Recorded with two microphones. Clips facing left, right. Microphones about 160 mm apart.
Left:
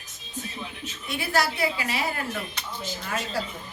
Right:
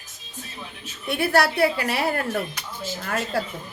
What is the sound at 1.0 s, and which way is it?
A woman's voice, 65° right (ahead or behind).